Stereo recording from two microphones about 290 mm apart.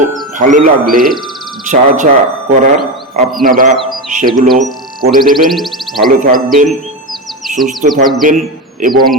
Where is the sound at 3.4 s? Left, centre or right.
Right.